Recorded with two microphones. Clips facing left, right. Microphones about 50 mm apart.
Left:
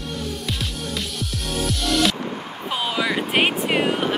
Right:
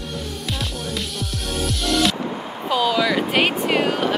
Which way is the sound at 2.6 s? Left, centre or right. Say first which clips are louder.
Right 5 dB; left.